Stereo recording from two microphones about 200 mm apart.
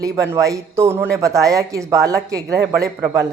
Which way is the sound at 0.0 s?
15° right (ahead or behind).